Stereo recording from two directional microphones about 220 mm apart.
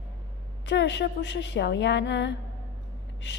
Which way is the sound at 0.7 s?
55° left (ahead or behind).